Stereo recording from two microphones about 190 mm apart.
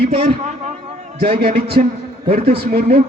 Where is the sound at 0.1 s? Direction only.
35° right (ahead or behind).